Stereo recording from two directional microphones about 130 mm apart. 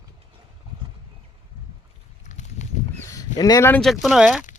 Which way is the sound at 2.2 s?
65° left (ahead or behind).